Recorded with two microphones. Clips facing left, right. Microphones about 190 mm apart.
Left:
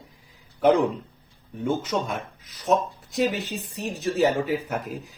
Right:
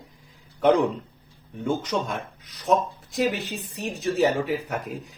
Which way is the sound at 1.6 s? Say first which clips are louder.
Even; 5° left (ahead or behind).